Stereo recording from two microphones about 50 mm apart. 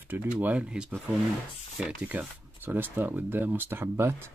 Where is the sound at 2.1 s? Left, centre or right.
Right.